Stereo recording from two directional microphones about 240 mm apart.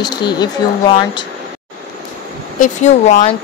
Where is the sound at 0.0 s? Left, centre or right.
Centre.